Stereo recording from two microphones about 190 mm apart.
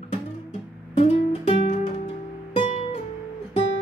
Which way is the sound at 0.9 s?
30° left (ahead or behind).